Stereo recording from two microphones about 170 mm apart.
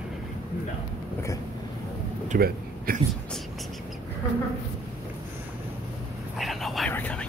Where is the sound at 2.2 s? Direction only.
55° right (ahead or behind).